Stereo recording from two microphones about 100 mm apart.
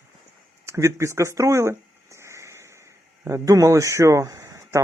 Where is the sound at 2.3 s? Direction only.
30° right (ahead or behind).